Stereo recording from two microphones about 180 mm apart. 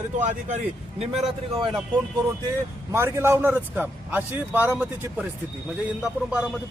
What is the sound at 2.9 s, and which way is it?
Speech, 15° right (ahead or behind).